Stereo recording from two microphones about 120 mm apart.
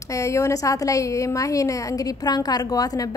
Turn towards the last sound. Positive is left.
turn(degrees=30)  # may be behind; listen again after turning